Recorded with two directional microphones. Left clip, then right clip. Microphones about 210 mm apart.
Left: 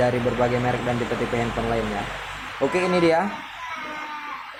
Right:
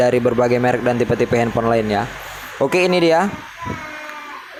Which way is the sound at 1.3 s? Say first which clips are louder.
Right 8 dB; 40° right (ahead or behind).